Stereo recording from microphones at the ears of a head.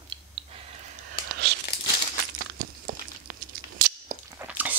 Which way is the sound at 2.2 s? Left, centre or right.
Right.